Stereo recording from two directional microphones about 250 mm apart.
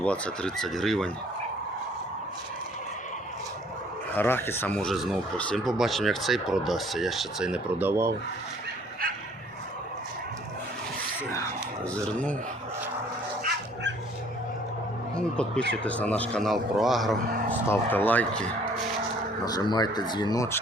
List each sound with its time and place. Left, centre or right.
0.0 s speech: centre
4.1 s speech: centre
11.9 s speech: centre
13.4 s dog: right
15.1 s speech: centre
19.5 s speech: centre